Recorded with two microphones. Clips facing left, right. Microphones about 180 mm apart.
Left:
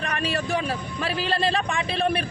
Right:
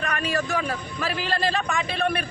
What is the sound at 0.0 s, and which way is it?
A man's voice, 30° left (ahead or behind).